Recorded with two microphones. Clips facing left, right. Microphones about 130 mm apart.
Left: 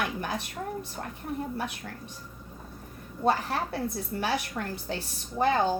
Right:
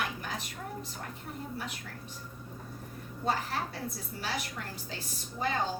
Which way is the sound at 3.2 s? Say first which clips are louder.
Left 6 dB; 65° left (ahead or behind).